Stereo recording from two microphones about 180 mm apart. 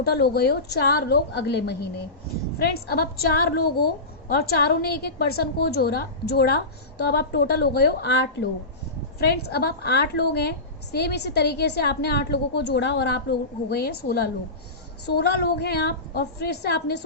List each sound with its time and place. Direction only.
0.0 s a woman's voice: 60° left (ahead or behind)
9.3 s a woman's voice: 60° left (ahead or behind)